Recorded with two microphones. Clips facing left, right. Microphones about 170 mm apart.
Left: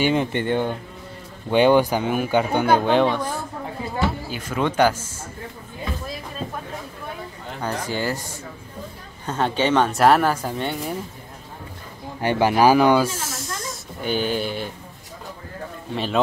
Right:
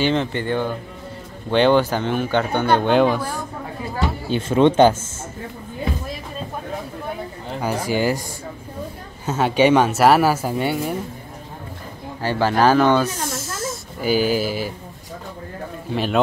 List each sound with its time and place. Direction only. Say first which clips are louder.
0.0 s speech: even; 10° left (ahead or behind); by 3.4 s 10° right (ahead or behind)
4.3 s speech: right 9 dB; 25° right (ahead or behind)
7.6 s speech: right 5 dB; 10° right (ahead or behind)
9.2 s speech: right 5 dB; 5° right (ahead or behind)
12.2 s speech: left 1 dB; 15° left (ahead or behind); by 14.7 s 5° right (ahead or behind)
15.9 s speech: right 3 dB; centre (ahead or behind)